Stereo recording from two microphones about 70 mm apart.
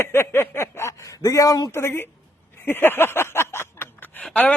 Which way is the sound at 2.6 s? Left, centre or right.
Left.